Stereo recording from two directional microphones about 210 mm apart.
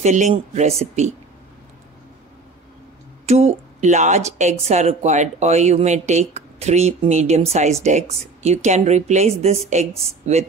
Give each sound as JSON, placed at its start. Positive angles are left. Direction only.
{"t": 0.0, "sound": "speech", "side_deg": -35}
{"t": 3.3, "sound": "speech", "side_deg": -30}